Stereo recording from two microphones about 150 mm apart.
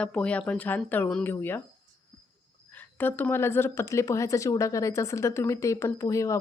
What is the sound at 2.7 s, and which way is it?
Speech, 15° left (ahead or behind).